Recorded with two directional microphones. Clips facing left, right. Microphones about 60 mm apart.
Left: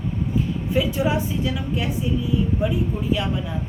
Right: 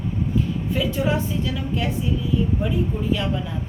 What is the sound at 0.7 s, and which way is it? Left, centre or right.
A woman's voice, centre.